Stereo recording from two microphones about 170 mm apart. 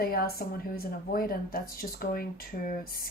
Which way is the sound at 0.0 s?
65° left (ahead or behind).